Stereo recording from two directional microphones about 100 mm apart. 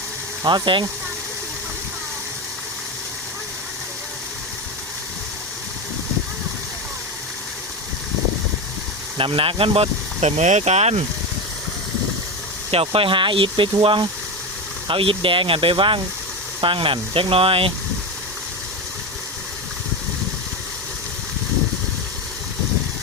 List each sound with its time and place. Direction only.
0.4 s speech: 50° right (ahead or behind)
9.1 s speech: 60° right (ahead or behind); by 11.0 s 90° right
12.7 s speech: 70° right (ahead or behind)